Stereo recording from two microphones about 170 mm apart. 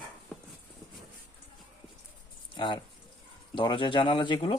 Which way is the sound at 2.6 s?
30° left (ahead or behind).